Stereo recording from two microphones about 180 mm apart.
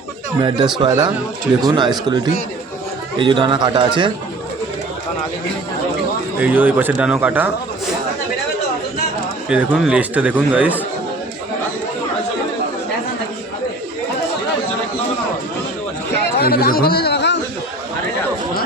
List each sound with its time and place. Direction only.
0.4 s a man's voice: 25° right (ahead or behind)
6.4 s speech: 10° right (ahead or behind)
9.5 s speech: 5° right (ahead or behind)
16.4 s a man's voice: 60° left (ahead or behind)